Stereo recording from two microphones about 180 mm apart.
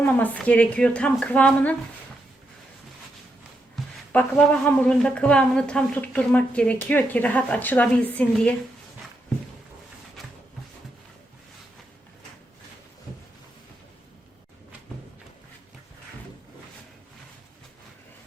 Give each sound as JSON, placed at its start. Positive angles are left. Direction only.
{"t": 0.0, "sound": "a woman's voice", "side_deg": 10}
{"t": 4.1, "sound": "a woman's voice", "side_deg": 10}
{"t": 10.2, "sound": "a sound", "side_deg": 0}